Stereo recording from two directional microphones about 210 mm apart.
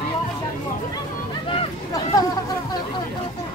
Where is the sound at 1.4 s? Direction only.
20° left (ahead or behind).